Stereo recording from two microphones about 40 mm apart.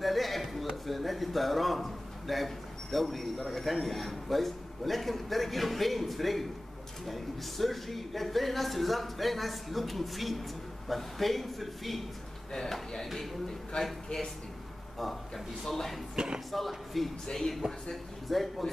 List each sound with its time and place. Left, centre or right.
0.0 s a sound: centre
0.8 s a man's voice: centre
13.7 s speech: left
15.0 s a man's voice: centre